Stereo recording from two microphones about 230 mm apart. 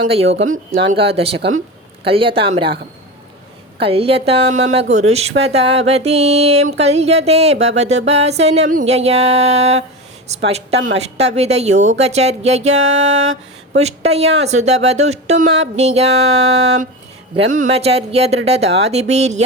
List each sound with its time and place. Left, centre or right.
0.3 s speech: right
0.9 s a woman's voice: right
1.4 s speech: right
2.0 s a woman's voice: right
3.8 s a woman's voice: right